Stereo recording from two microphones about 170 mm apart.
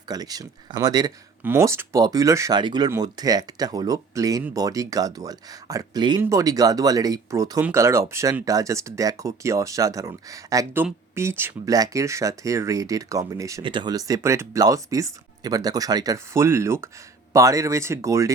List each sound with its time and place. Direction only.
0.1 s speech: 20° right (ahead or behind)